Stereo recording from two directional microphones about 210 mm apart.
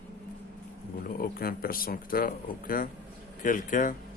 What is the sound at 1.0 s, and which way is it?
Speech, 45° left (ahead or behind).